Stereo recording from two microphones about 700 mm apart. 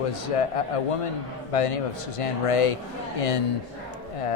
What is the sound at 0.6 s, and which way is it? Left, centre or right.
Speech, left.